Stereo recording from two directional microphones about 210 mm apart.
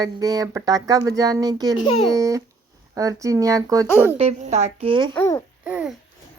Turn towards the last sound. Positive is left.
turn(degrees=-5)  # may be behind; listen again after turning